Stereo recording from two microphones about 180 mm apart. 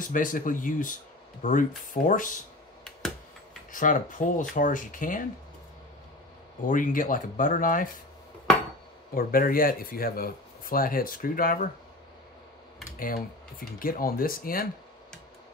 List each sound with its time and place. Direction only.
0.0 s speech: 50° left (ahead or behind)
3.7 s speech: 45° left (ahead or behind)
6.7 s speech: 50° left (ahead or behind)
9.1 s speech: 55° left (ahead or behind)
13.0 s speech: 50° left (ahead or behind)